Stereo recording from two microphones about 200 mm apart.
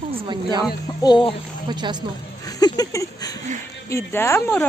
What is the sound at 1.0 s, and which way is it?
Speech, 25° left (ahead or behind).